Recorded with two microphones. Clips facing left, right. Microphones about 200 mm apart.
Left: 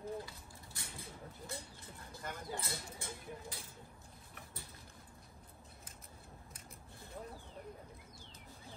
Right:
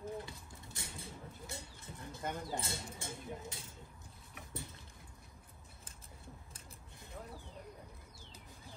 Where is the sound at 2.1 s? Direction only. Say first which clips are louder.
Right 4 dB; 20° right (ahead or behind).